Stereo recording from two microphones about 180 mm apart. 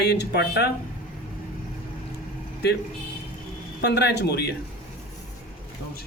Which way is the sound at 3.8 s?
70° left (ahead or behind).